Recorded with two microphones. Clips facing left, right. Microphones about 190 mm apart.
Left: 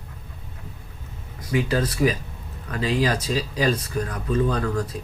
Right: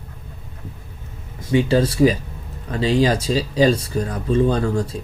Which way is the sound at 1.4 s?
30° right (ahead or behind).